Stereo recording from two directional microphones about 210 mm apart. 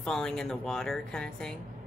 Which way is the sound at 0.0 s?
5° left (ahead or behind).